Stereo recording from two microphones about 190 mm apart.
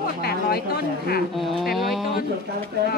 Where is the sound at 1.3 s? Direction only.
Centre (ahead or behind).